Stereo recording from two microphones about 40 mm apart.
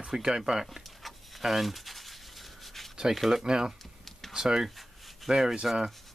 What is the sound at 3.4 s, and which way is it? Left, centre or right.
Speech, centre.